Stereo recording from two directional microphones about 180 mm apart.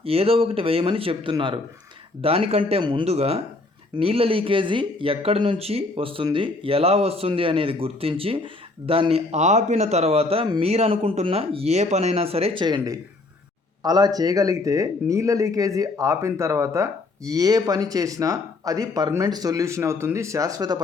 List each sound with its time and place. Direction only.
0.0 s a man's voice: 30° right (ahead or behind)